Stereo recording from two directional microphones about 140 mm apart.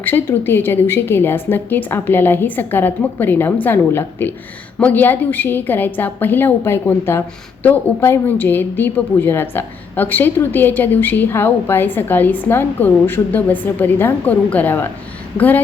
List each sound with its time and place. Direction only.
0.0 s a woman's voice: 15° left (ahead or behind)